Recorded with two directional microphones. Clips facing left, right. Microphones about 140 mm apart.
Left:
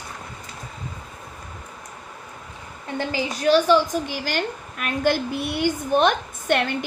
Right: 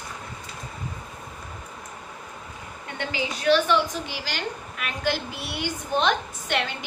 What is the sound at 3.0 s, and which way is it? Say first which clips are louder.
A woman's voice: left 4 dB; 40° left (ahead or behind).